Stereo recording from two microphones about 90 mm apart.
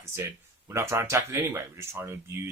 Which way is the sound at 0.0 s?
30° right (ahead or behind).